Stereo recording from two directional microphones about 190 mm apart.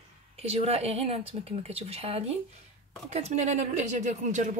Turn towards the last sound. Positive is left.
turn(degrees=-40)  # may be behind; listen again after turning